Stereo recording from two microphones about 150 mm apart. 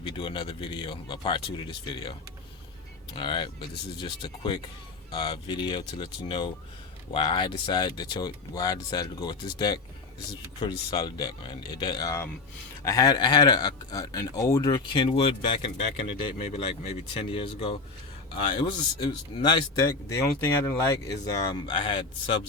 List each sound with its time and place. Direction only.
0.1 s speech: 35° left (ahead or behind)
3.2 s speech: 30° left (ahead or behind)
21.5 s speech: 35° left (ahead or behind)